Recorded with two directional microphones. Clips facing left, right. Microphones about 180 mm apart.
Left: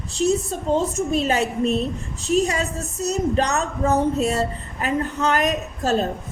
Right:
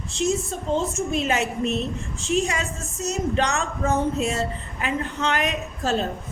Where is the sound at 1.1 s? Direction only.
35° left (ahead or behind).